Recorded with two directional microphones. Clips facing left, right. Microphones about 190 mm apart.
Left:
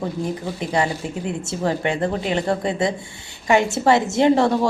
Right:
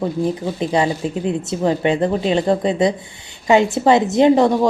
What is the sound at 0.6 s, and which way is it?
A woman's voice, 20° right (ahead or behind).